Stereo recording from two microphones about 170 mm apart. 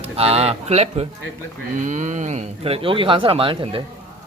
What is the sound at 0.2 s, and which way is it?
Speech, 35° right (ahead or behind).